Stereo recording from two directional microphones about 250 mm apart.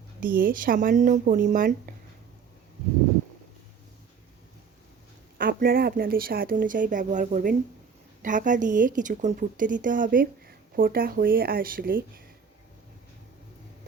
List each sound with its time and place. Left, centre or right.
0.2 s a woman's voice: right
5.4 s a woman's voice: right